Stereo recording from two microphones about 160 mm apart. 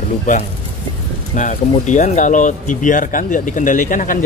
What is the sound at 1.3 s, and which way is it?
Speech, 50° left (ahead or behind).